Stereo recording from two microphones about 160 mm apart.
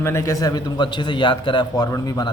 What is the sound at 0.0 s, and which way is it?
A man's voice, 15° left (ahead or behind).